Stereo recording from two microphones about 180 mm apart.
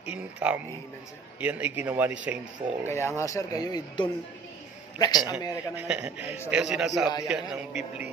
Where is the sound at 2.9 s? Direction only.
15° left (ahead or behind).